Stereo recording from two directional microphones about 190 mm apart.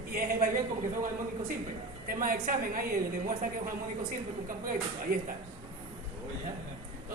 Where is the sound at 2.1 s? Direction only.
45° right (ahead or behind).